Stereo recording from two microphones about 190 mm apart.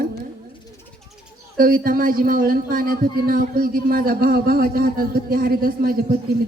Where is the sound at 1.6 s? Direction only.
50° right (ahead or behind).